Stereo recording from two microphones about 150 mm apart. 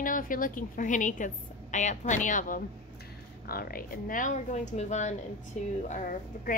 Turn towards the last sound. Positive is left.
turn(degrees=60)  # may be behind; listen again after turning